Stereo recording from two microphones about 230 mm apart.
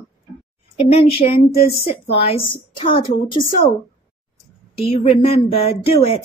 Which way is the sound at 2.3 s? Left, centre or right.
Left.